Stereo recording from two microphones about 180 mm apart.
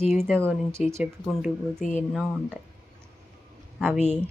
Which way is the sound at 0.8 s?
40° left (ahead or behind).